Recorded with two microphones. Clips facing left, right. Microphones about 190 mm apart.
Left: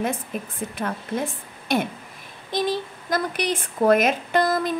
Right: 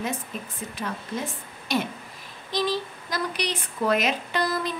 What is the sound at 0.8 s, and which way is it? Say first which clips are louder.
A woman's voice: left 4 dB; 55° left (ahead or behind).